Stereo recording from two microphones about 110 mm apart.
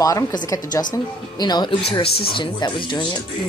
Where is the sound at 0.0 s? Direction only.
30° left (ahead or behind).